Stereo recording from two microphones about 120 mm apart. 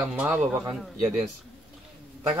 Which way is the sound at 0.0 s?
15° right (ahead or behind).